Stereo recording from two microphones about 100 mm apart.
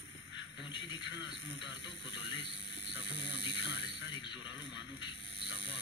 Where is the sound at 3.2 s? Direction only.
55° left (ahead or behind).